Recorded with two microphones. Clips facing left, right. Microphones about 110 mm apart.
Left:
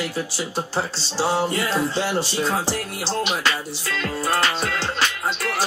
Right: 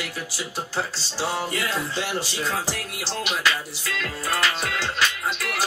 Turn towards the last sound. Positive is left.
turn(degrees=30)  # may be behind; listen again after turning